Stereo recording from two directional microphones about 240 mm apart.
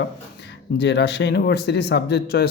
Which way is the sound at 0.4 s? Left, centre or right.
Left.